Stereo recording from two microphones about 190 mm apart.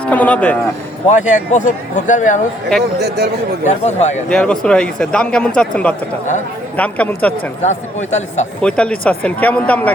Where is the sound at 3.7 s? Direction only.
35° left (ahead or behind).